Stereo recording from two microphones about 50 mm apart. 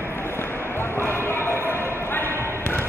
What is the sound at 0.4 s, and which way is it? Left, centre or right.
Basketball bounce, left.